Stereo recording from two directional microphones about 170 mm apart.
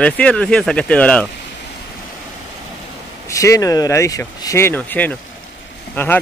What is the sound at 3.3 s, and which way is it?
Speech, 20° left (ahead or behind).